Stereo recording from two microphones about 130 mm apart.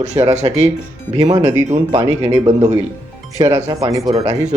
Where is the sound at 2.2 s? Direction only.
55° right (ahead or behind).